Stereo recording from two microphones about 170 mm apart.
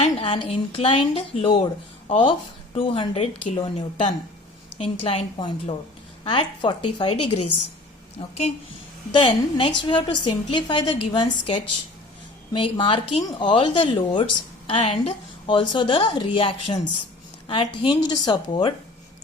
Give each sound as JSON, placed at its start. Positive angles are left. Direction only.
{"t": 0.0, "sound": "a woman's voice", "side_deg": 35}
{"t": 9.1, "sound": "a woman's voice", "side_deg": 30}